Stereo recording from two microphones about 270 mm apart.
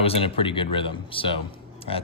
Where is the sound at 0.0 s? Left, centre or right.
Left.